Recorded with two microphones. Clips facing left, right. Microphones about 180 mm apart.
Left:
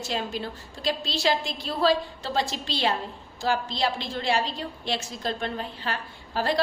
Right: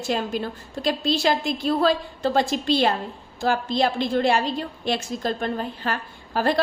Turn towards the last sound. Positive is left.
turn(degrees=-50)  # may be behind; listen again after turning